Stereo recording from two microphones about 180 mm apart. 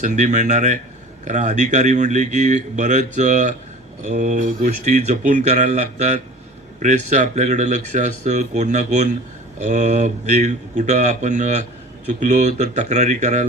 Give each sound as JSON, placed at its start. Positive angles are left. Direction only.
{"t": 0.0, "sound": "speech", "side_deg": -45}